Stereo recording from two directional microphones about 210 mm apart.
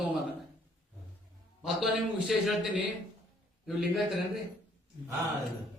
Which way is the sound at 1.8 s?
Centre (ahead or behind).